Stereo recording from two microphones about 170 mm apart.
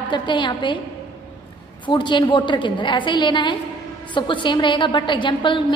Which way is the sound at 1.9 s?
25° left (ahead or behind).